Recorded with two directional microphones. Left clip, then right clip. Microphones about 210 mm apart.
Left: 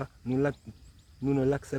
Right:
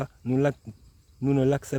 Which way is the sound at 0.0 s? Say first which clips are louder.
Right 4 dB; 50° right (ahead or behind).